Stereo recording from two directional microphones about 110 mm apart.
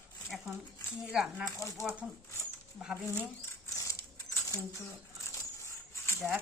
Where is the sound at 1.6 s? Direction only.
25° left (ahead or behind).